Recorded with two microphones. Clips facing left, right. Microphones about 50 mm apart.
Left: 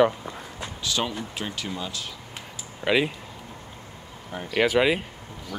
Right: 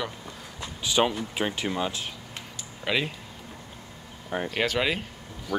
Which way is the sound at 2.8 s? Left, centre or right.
Centre.